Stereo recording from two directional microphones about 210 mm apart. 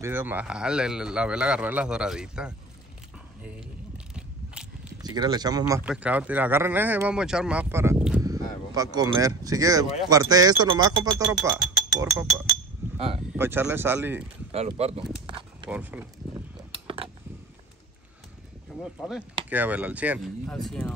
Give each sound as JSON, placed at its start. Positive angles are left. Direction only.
{"t": 0.0, "sound": "speech", "side_deg": -10}
{"t": 5.0, "sound": "speech", "side_deg": -20}
{"t": 5.9, "sound": "speech", "side_deg": -5}
{"t": 12.9, "sound": "speech", "side_deg": -25}
{"t": 13.3, "sound": "speech", "side_deg": -10}
{"t": 14.5, "sound": "speech", "side_deg": -30}
{"t": 15.2, "sound": "a sound", "side_deg": -25}
{"t": 15.7, "sound": "speech", "side_deg": -10}
{"t": 16.8, "sound": "mechanisms", "side_deg": -25}
{"t": 18.8, "sound": "speech", "side_deg": 0}